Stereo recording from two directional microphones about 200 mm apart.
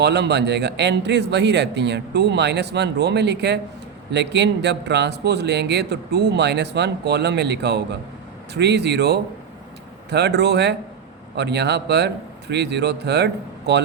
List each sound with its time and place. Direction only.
0.0 s speech: 55° right (ahead or behind)